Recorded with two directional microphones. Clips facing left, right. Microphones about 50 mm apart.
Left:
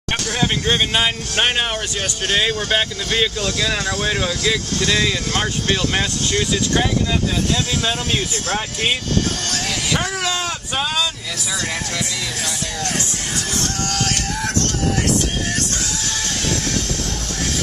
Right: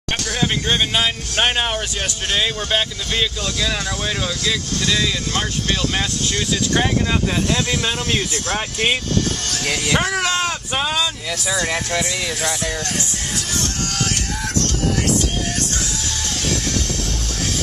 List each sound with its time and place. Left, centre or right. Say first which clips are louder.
0.3 s speech: left 1 dB; centre
4.7 s speech: left 2 dB; left
9.7 s speech: right 4 dB; right
10.7 s speech: left 1 dB; centre
11.5 s speech: right 3 dB; right